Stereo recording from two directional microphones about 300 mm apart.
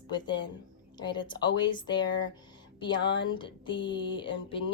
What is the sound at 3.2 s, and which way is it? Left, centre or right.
A woman's voice, centre.